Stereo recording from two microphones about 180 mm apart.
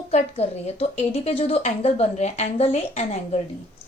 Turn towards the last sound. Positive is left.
turn(degrees=35)  # may be behind; listen again after turning